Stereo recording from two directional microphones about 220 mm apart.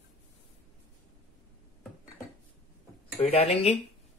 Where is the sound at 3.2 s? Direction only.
30° left (ahead or behind).